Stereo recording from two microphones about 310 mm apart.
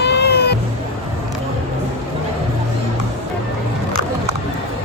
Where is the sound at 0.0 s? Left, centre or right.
Left.